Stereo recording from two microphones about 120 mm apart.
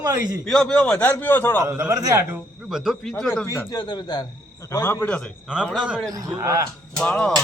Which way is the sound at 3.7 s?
35° left (ahead or behind).